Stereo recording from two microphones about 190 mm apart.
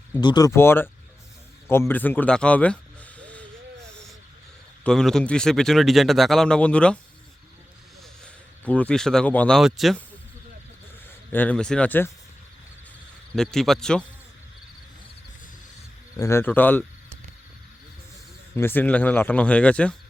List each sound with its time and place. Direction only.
0.2 s speech: 20° left (ahead or behind)
1.9 s speech: 10° left (ahead or behind)
4.8 s speech: 5° left (ahead or behind)
8.2 s speech: 5° left (ahead or behind)
11.3 s speech: 10° left (ahead or behind)
13.3 s speech: centre (ahead or behind)
16.1 s speech: 15° left (ahead or behind)
18.5 s speech: 10° left (ahead or behind)